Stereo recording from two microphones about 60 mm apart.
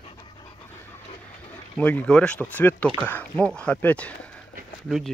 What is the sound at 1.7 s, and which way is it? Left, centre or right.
Speech, left.